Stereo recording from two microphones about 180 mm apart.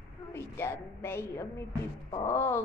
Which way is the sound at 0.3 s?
15° left (ahead or behind).